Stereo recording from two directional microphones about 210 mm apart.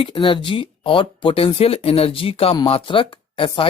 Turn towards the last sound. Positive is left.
turn(degrees=25)  # may be behind; listen again after turning